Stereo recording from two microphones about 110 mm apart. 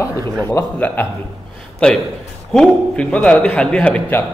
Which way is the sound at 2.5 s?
5° left (ahead or behind).